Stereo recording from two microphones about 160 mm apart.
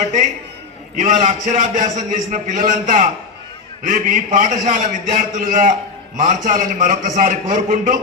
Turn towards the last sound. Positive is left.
turn(degrees=-55)  # may be behind; listen again after turning